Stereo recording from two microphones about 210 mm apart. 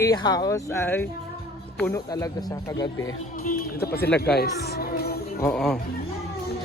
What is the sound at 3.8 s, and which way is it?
Speech, 50° left (ahead or behind).